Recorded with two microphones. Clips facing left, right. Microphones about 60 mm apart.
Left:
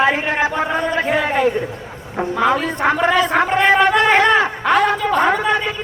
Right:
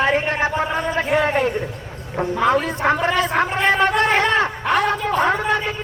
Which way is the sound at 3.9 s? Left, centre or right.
Left.